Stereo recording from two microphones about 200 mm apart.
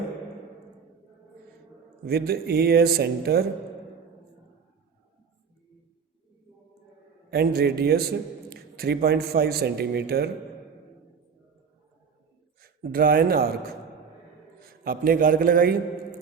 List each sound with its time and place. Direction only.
2.0 s speech: 50° right (ahead or behind)
7.3 s a man's voice: 50° right (ahead or behind)
12.5 s speech: 50° right (ahead or behind)
14.6 s a man's voice: 50° right (ahead or behind)